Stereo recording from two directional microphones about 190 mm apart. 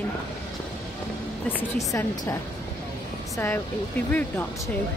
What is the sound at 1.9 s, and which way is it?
Speech, 15° left (ahead or behind).